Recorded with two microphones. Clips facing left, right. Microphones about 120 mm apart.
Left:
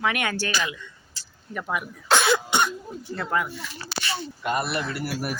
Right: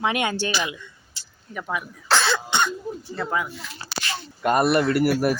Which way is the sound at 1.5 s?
5° left (ahead or behind).